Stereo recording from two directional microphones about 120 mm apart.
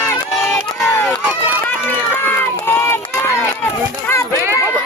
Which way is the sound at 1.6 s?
15° left (ahead or behind).